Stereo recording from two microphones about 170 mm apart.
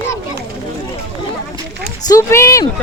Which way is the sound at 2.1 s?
15° left (ahead or behind).